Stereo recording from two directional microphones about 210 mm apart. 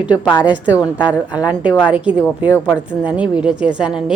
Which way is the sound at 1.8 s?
5° right (ahead or behind).